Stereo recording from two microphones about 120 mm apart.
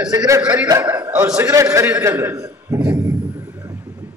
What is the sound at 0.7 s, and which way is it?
A man's voice, 30° right (ahead or behind).